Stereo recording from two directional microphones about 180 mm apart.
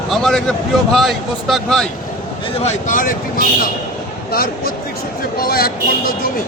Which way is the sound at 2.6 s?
45° left (ahead or behind).